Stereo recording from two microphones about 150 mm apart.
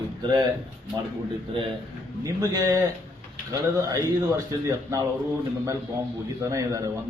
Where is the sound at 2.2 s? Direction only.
20° right (ahead or behind).